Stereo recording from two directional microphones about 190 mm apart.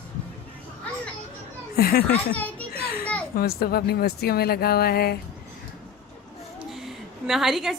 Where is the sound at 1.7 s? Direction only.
55° left (ahead or behind).